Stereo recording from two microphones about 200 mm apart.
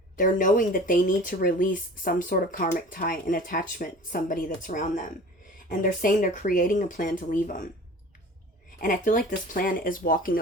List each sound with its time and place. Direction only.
0.2 s speech: 40° left (ahead or behind)
8.8 s speech: 40° left (ahead or behind)